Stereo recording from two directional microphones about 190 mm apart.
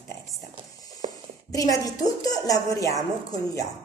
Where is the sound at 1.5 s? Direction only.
20° left (ahead or behind).